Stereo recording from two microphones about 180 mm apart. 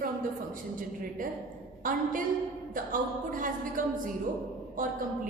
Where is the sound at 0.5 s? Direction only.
50° right (ahead or behind).